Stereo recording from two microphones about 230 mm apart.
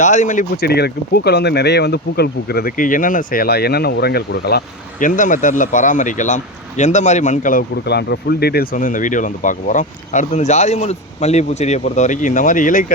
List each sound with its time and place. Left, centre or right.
0.0 s speech: left